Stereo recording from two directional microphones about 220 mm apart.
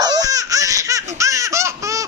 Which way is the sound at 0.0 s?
15° right (ahead or behind).